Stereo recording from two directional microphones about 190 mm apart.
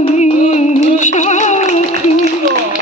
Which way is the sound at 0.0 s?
35° left (ahead or behind).